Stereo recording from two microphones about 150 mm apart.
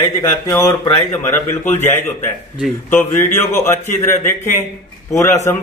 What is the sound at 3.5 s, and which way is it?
A man's voice, 15° left (ahead or behind).